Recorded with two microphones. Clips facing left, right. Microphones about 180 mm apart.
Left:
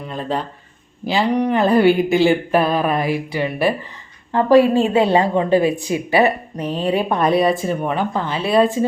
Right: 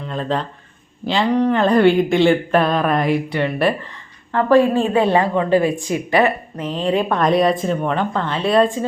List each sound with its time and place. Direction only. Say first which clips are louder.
0.0 s speech: right 1 dB; 5° left (ahead or behind)
4.3 s a woman's voice: left 1 dB; 20° left (ahead or behind)